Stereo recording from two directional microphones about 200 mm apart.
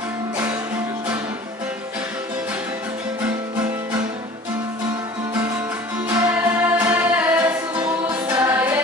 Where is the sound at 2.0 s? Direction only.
5° right (ahead or behind).